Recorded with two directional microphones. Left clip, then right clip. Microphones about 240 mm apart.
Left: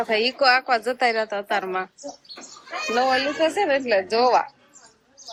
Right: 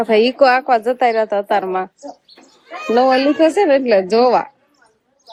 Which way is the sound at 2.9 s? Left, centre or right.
Right.